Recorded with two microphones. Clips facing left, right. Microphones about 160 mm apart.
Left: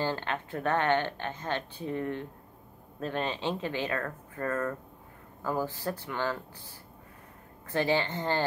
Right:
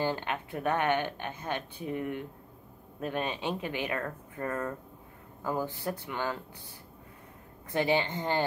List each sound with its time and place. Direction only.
0.0 s speech: 15° right (ahead or behind)
7.7 s speech: 15° right (ahead or behind)